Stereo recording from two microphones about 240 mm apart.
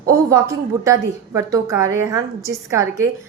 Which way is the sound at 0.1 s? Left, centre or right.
Centre.